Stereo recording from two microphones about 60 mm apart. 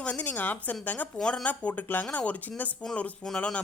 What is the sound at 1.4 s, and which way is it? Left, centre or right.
Speech, left.